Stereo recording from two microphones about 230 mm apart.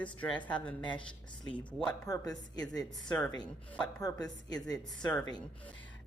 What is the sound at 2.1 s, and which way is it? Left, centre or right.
Speech, centre.